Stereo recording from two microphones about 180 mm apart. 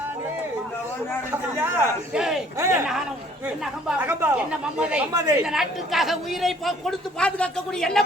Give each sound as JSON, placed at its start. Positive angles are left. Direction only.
{"t": 1.3, "sound": "speech", "side_deg": -10}
{"t": 2.6, "sound": "speech", "side_deg": -15}
{"t": 3.8, "sound": "speech", "side_deg": -10}
{"t": 5.1, "sound": "a woman's voice", "side_deg": -20}
{"t": 5.5, "sound": "speech", "side_deg": 0}